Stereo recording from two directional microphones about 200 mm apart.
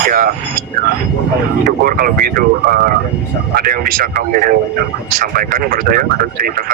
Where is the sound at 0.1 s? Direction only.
45° right (ahead or behind).